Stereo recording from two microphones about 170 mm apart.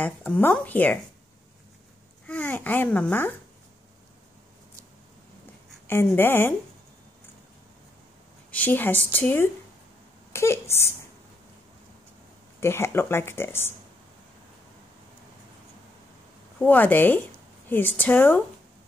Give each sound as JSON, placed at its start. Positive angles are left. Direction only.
{"t": 0.0, "sound": "speech", "side_deg": 10}
{"t": 2.2, "sound": "speech", "side_deg": 10}
{"t": 6.1, "sound": "speech", "side_deg": 10}
{"t": 8.5, "sound": "speech", "side_deg": 10}
{"t": 12.5, "sound": "speech", "side_deg": 15}
{"t": 16.5, "sound": "speech", "side_deg": 10}